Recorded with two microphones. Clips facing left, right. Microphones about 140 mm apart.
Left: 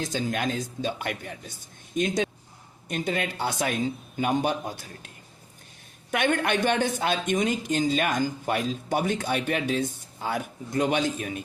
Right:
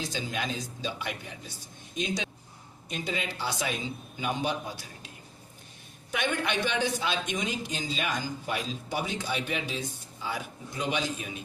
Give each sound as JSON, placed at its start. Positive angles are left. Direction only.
{"t": 0.0, "sound": "speech", "side_deg": 50}
{"t": 6.1, "sound": "speech", "side_deg": 55}